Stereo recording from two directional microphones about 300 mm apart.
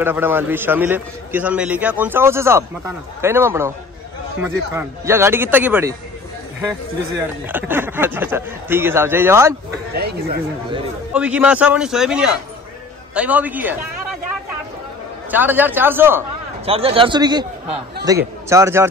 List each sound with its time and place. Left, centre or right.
0.0 s a man's voice: centre
7.4 s a man's voice: centre
9.9 s speech: right
11.1 s a man's voice: centre
15.3 s a man's voice: centre
16.6 s a man's voice: centre